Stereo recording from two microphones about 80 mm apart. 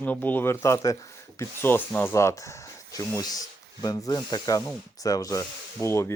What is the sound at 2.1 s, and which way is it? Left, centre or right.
Speech, left.